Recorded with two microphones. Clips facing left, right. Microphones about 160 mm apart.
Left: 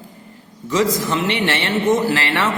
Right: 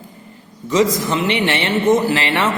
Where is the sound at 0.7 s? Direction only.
20° right (ahead or behind).